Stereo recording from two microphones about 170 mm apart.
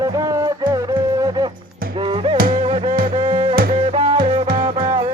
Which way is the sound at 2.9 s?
55° right (ahead or behind).